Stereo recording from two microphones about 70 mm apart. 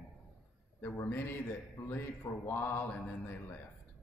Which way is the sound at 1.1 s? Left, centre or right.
Left.